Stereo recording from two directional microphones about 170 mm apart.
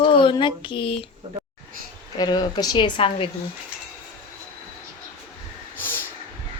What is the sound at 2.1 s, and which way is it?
Speech, 25° left (ahead or behind).